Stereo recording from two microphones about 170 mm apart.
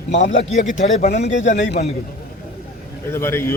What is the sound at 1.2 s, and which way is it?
Speech, 90° left.